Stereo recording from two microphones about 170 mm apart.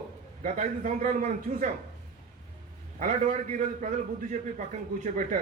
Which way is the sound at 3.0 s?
50° right (ahead or behind).